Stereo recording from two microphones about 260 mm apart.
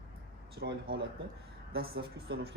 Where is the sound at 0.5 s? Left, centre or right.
Right.